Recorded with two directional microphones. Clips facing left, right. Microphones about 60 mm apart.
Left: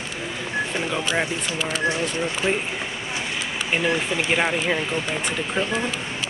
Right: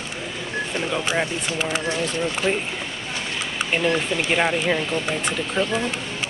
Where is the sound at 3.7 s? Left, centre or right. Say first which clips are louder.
Right 1 dB; centre.